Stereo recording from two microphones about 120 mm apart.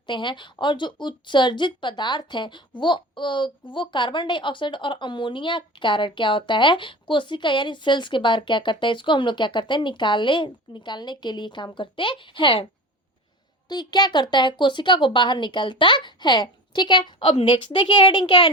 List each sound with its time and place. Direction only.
0.1 s a woman's voice: 40° left (ahead or behind)
13.7 s a woman's voice: 35° left (ahead or behind)